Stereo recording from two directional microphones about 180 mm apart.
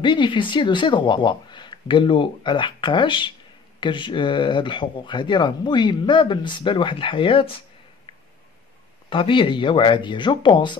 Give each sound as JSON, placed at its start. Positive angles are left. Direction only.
{"t": 0.0, "sound": "speech", "side_deg": 25}
{"t": 9.1, "sound": "speech", "side_deg": 30}